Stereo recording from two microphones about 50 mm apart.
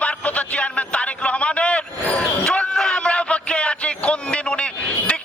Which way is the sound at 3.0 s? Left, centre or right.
Left.